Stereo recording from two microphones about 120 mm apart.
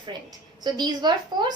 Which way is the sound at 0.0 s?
35° right (ahead or behind).